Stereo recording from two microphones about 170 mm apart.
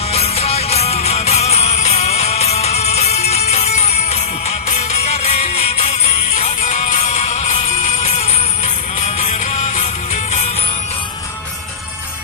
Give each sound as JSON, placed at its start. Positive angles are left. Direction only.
{"t": 0.1, "sound": "music", "side_deg": 35}